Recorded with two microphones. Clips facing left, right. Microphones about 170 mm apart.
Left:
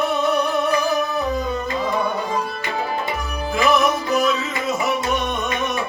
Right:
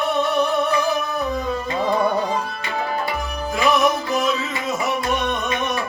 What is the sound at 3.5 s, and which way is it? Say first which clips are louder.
Music: even; centre (ahead or behind).